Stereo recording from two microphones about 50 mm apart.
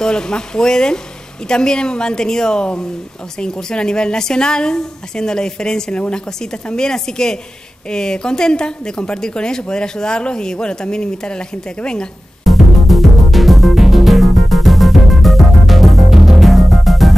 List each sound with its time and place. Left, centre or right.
0.0 s a woman's voice: centre
12.4 s music: centre